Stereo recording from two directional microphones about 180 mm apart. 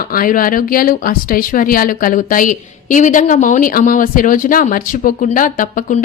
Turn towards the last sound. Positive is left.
turn(degrees=45)  # may be behind; listen again after turning